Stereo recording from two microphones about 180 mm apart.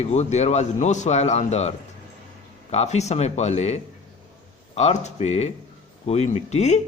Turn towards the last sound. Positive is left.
turn(degrees=40)  # may be behind; listen again after turning